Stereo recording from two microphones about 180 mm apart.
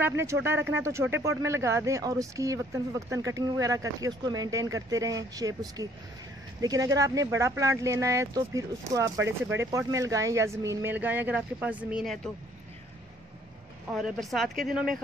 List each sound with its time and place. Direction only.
0.0 s speech: 15° right (ahead or behind)
13.9 s speech: centre (ahead or behind)